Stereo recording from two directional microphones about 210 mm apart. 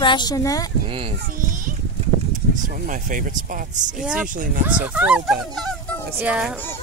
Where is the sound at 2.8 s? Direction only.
40° right (ahead or behind).